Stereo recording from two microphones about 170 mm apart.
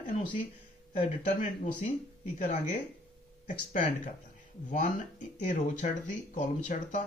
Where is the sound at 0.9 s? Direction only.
50° left (ahead or behind).